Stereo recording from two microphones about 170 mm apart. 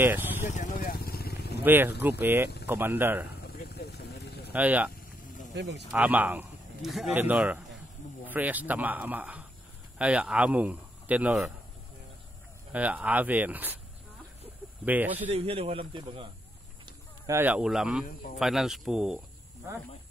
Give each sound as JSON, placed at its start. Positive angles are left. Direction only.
{"t": 0.0, "sound": "vehicle", "side_deg": -10}
{"t": 0.5, "sound": "vehicle", "side_deg": 45}
{"t": 1.6, "sound": "speech", "side_deg": -10}
{"t": 3.3, "sound": "vehicle", "side_deg": 70}
{"t": 4.5, "sound": "speech", "side_deg": -10}
{"t": 5.5, "sound": "speech", "side_deg": -90}
{"t": 5.9, "sound": "speech", "side_deg": -10}
{"t": 12.7, "sound": "speech", "side_deg": -10}
{"t": 14.9, "sound": "speech", "side_deg": -10}
{"t": 15.3, "sound": "speech", "side_deg": -35}
{"t": 16.8, "sound": "livestock", "side_deg": -15}
{"t": 17.6, "sound": "speech", "side_deg": 0}